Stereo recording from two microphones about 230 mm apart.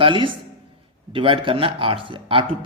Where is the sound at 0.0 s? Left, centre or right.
Right.